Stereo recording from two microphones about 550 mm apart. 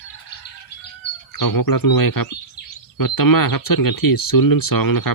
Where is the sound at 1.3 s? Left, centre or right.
Left.